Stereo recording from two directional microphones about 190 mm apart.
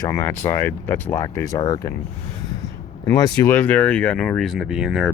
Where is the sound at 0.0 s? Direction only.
15° left (ahead or behind).